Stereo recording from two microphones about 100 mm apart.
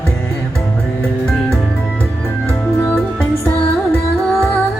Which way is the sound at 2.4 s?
15° left (ahead or behind).